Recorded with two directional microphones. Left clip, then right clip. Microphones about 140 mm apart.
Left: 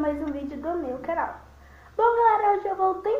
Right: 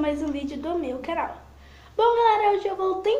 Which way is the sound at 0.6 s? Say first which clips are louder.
Left 1 dB; 15° right (ahead or behind).